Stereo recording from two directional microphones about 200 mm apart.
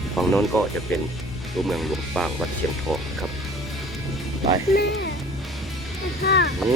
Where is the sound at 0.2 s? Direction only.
Centre (ahead or behind).